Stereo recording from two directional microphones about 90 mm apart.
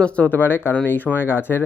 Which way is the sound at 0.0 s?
20° left (ahead or behind).